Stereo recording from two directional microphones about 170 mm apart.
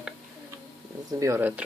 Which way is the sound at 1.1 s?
20° right (ahead or behind).